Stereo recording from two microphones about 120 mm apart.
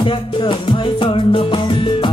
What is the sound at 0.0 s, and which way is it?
Music, 45° left (ahead or behind).